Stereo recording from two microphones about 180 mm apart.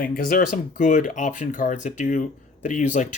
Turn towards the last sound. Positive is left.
turn(degrees=45)  # may be behind; listen again after turning